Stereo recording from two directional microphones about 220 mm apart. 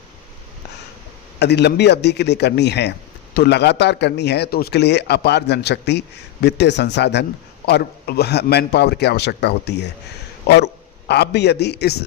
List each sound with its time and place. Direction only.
1.4 s a man's voice: 50° left (ahead or behind)
11.1 s a man's voice: 50° left (ahead or behind)